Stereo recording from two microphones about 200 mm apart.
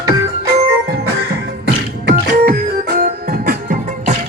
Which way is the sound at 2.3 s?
50° right (ahead or behind).